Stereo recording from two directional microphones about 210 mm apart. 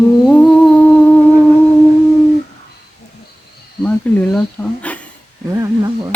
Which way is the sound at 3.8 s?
5° left (ahead or behind).